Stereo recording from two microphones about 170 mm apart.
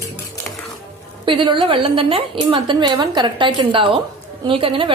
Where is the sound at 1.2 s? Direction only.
30° right (ahead or behind).